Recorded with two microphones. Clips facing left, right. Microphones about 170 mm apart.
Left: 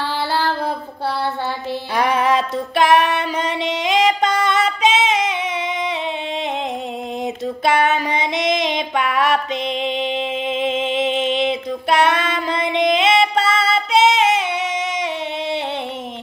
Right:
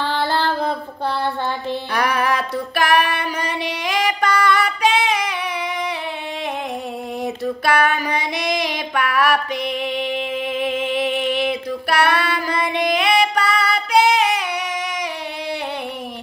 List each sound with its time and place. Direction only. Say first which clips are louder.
0.1 s a sound: even; 10° left (ahead or behind)
2.0 s female singing: left 4 dB; 20° left (ahead or behind)
7.4 s child singing: left 1 dB; 20° left (ahead or behind)